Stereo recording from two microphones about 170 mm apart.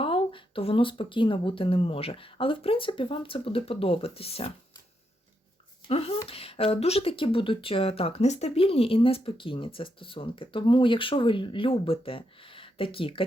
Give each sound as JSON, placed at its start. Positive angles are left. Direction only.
{"t": 0.0, "sound": "speech", "side_deg": 30}
{"t": 5.9, "sound": "speech", "side_deg": 35}